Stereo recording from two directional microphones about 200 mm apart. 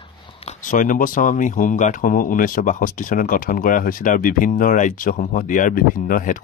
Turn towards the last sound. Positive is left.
turn(degrees=40)  # may be behind; listen again after turning